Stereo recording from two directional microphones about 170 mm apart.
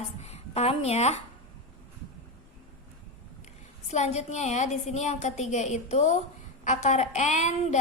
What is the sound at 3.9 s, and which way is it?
A woman's voice, 40° left (ahead or behind).